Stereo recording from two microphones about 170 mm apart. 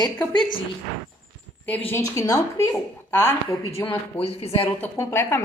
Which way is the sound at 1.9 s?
20° left (ahead or behind).